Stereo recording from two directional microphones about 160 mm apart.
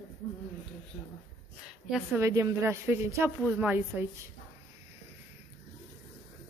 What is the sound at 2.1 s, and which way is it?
A woman's voice, 20° right (ahead or behind).